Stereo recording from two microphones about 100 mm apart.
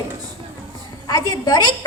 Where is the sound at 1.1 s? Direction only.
40° left (ahead or behind).